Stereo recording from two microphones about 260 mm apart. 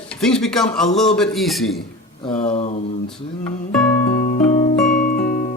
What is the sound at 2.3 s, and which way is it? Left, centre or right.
Speech, left.